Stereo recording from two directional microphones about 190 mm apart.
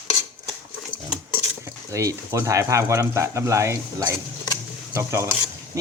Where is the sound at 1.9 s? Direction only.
15° right (ahead or behind).